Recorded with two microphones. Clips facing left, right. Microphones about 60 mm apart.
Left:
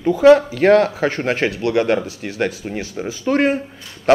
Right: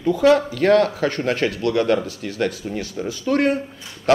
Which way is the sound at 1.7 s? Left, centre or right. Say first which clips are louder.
Left 1 dB; left.